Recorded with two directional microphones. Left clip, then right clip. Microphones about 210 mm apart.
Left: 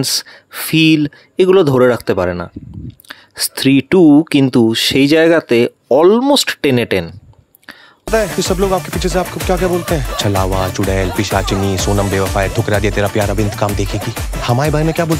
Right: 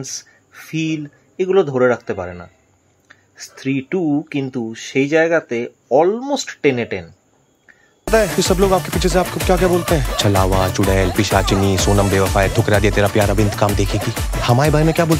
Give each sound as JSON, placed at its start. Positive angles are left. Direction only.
{"t": 0.0, "sound": "speech", "side_deg": 35}
{"t": 8.1, "sound": "speech", "side_deg": 0}